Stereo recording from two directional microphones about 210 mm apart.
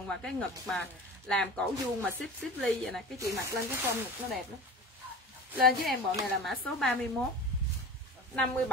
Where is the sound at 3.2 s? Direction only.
15° right (ahead or behind).